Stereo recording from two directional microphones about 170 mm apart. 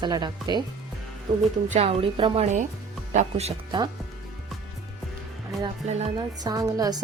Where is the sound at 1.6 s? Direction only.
40° right (ahead or behind).